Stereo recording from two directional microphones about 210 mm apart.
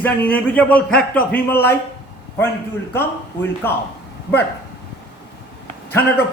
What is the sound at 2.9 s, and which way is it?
Speech, 10° left (ahead or behind).